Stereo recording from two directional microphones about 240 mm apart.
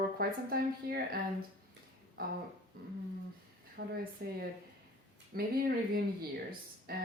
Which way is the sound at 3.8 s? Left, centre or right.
Right.